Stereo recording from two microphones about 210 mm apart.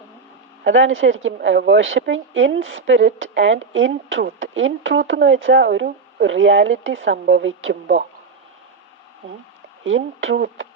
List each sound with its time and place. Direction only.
0.6 s a woman's voice: 65° right (ahead or behind)
9.8 s a woman's voice: 65° right (ahead or behind)